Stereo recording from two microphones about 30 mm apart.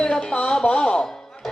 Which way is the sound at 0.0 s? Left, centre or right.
Left.